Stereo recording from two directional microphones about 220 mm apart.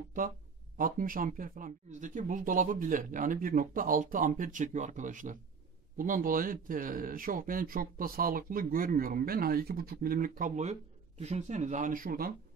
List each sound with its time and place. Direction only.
0.2 s speech: 40° right (ahead or behind)